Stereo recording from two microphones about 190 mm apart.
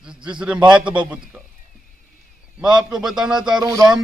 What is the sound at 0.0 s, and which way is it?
A man's voice, 5° right (ahead or behind).